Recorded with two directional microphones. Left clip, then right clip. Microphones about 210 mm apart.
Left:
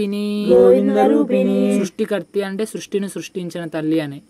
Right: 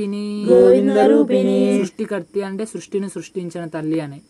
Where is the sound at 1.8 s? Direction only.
35° left (ahead or behind).